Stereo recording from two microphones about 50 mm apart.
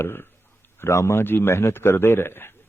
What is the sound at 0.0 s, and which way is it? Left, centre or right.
Speech, left.